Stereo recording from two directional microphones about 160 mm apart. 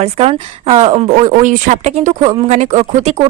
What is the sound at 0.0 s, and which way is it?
Speech, 40° right (ahead or behind).